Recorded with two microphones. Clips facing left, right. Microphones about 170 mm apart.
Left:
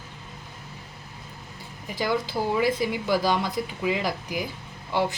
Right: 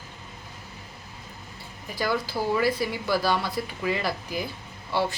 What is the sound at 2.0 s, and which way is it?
Speech, 20° left (ahead or behind).